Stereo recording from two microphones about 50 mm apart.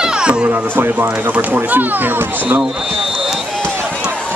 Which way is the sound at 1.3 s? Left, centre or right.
Right.